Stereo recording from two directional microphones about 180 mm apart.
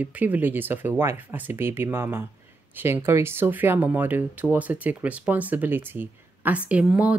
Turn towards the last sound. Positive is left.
turn(degrees=-5)  # may be behind; listen again after turning